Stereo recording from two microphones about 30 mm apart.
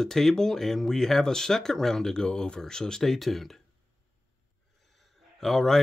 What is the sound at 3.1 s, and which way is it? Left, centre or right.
Speech, centre.